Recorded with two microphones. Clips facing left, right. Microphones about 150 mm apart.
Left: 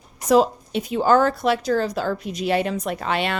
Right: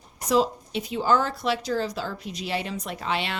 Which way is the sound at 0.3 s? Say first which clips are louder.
Left 6 dB; 50° left (ahead or behind).